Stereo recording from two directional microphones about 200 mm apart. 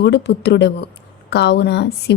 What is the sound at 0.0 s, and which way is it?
Speech, 55° left (ahead or behind).